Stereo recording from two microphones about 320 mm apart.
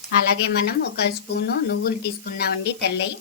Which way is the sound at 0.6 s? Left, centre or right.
Left.